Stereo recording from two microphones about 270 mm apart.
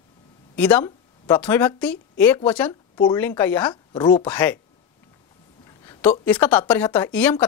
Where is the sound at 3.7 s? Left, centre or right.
Centre.